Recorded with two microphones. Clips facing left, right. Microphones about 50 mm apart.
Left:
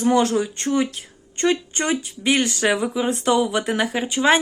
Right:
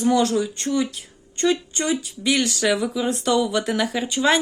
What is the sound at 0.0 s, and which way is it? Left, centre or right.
Speech, left.